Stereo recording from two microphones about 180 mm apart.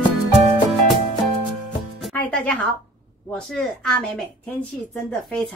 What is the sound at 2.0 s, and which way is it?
Music, 10° left (ahead or behind).